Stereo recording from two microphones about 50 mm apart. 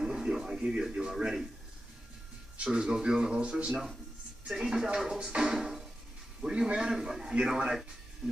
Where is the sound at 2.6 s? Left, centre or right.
Centre.